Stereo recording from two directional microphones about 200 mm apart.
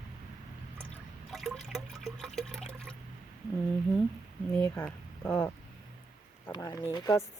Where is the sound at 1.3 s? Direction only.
Centre (ahead or behind).